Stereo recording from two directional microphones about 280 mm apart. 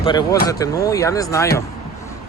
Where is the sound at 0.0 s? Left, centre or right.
Centre.